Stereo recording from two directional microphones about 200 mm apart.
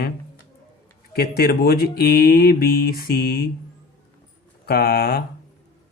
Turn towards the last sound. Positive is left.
turn(degrees=50)  # may be behind; listen again after turning